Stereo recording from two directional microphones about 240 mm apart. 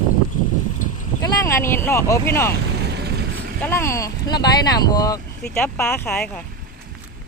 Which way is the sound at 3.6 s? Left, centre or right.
Centre.